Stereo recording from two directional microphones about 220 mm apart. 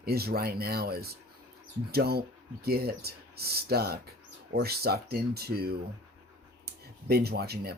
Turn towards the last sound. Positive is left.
turn(degrees=-45)  # may be behind; listen again after turning